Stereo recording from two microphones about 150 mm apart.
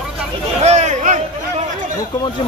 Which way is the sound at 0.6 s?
50° right (ahead or behind).